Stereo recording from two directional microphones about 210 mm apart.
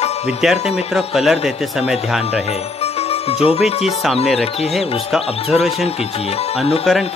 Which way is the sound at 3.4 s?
30° left (ahead or behind).